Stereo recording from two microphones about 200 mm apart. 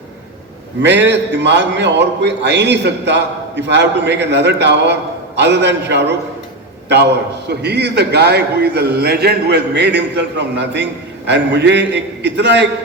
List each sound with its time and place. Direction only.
0.8 s a man's voice: 60° right (ahead or behind)